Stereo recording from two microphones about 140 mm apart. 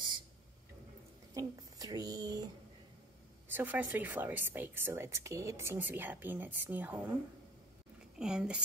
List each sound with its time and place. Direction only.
1.3 s a sound: 25° right (ahead or behind)
3.4 s a woman's voice: 15° right (ahead or behind)
8.2 s speech: 5° right (ahead or behind)